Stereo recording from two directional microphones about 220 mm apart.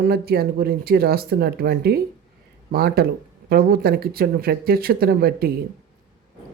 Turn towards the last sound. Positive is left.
turn(degrees=-45)  # may be behind; listen again after turning